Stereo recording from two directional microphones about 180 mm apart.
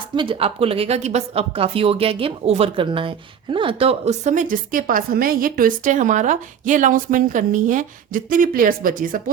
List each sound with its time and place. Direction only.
0.2 s speech: 30° right (ahead or behind); by 9.3 s 50° right (ahead or behind)